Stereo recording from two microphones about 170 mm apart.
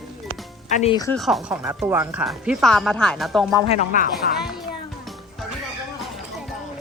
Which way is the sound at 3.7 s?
45° left (ahead or behind).